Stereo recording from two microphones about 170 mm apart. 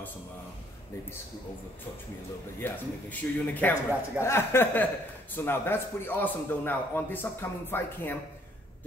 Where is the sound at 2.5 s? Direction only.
10° left (ahead or behind).